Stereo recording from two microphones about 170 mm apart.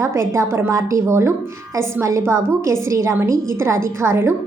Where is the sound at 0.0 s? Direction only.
15° right (ahead or behind).